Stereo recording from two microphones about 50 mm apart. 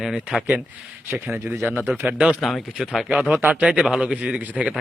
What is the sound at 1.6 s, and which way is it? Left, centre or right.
Speech, right.